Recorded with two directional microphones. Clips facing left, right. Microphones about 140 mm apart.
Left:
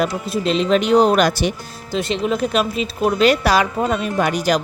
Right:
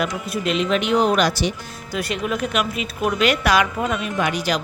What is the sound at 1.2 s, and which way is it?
Speech, 50° left (ahead or behind).